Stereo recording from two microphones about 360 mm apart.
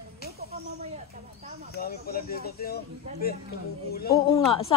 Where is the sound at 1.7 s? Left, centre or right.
Left.